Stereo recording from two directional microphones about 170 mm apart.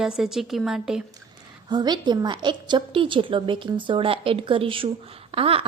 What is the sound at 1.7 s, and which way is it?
A woman's voice, 25° right (ahead or behind).